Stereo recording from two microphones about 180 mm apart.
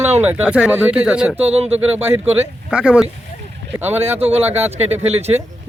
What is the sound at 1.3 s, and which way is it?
Speech, 35° right (ahead or behind).